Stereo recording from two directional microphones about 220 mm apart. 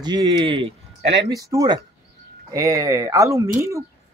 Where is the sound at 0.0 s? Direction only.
20° right (ahead or behind).